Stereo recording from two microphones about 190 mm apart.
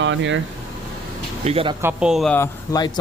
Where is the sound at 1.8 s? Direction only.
5° right (ahead or behind).